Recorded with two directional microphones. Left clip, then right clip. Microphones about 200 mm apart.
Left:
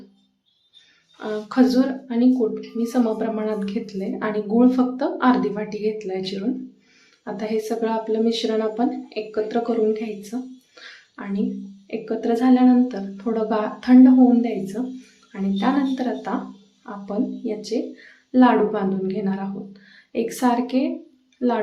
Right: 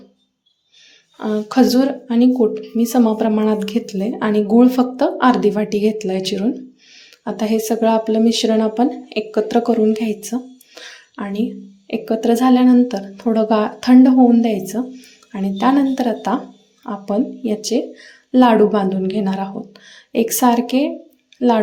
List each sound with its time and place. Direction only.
1.2 s a woman's voice: 25° right (ahead or behind)